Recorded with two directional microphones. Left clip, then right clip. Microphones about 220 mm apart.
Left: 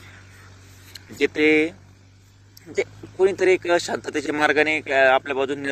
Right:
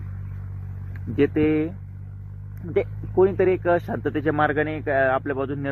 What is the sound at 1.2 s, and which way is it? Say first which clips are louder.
Speech: left 5 dB; 20° left (ahead or behind).